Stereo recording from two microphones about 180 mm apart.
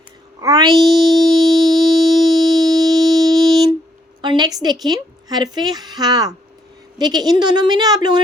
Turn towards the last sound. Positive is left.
turn(degrees=-20)  # may be behind; listen again after turning